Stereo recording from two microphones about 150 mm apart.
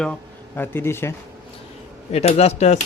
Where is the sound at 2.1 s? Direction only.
45° left (ahead or behind).